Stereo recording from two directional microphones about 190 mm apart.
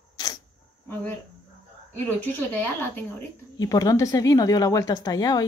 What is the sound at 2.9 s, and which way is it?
Speech, 15° left (ahead or behind).